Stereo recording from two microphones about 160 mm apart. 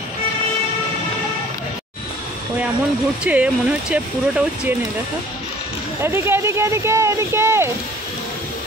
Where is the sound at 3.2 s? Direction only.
5° right (ahead or behind).